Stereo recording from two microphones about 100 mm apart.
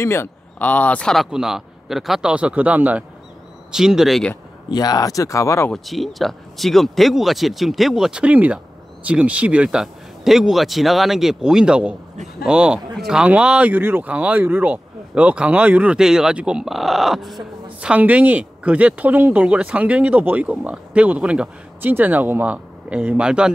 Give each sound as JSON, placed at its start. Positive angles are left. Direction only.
{"t": 0.0, "sound": "speech", "side_deg": 25}
{"t": 1.1, "sound": "speech", "side_deg": -5}
{"t": 4.6, "sound": "speech", "side_deg": 40}
{"t": 5.7, "sound": "speech", "side_deg": 0}
{"t": 17.7, "sound": "speech", "side_deg": -15}